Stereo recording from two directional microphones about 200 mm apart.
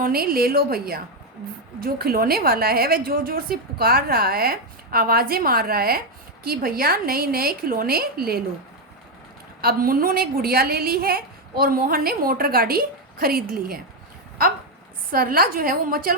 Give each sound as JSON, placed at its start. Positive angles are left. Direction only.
{"t": 0.0, "sound": "a woman's voice", "side_deg": -45}
{"t": 9.6, "sound": "a woman's voice", "side_deg": -45}
{"t": 15.1, "sound": "a woman's voice", "side_deg": -45}